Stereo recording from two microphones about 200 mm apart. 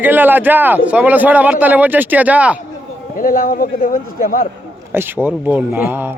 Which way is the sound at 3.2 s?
45° left (ahead or behind).